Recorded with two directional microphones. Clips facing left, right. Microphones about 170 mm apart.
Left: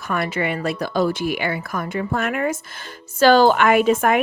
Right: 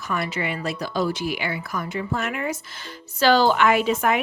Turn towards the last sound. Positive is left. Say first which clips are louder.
# left 5 dB
turn(degrees=50)  # may be behind; listen again after turning